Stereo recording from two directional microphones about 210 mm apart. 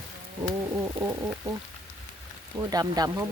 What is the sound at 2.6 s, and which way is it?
Speech, 20° right (ahead or behind).